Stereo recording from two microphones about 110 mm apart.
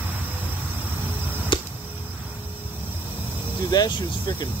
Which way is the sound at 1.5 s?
45° left (ahead or behind).